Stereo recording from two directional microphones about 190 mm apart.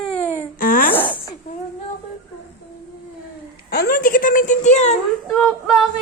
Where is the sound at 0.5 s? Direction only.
50° left (ahead or behind).